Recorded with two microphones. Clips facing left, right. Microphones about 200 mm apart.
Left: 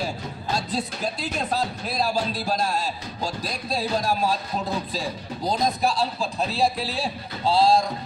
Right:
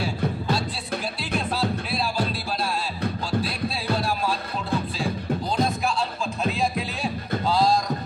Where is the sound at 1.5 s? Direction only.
40° left (ahead or behind).